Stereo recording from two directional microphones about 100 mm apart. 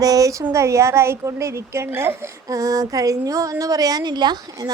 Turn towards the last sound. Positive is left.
turn(degrees=-40)  # may be behind; listen again after turning